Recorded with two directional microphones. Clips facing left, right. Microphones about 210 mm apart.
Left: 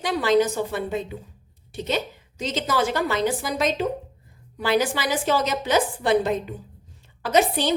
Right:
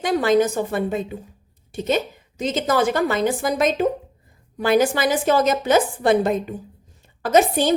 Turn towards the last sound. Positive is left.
turn(degrees=-50)  # may be behind; listen again after turning